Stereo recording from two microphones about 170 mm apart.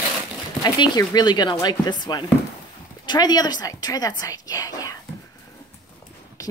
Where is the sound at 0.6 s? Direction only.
25° left (ahead or behind).